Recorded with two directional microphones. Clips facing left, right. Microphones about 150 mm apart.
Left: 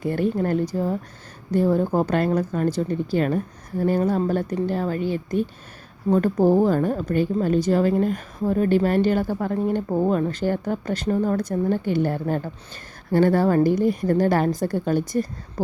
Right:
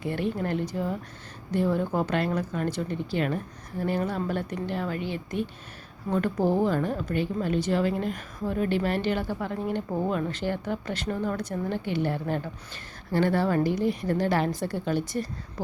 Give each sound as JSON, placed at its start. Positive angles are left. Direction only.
{"t": 0.0, "sound": "a woman's voice", "side_deg": 40}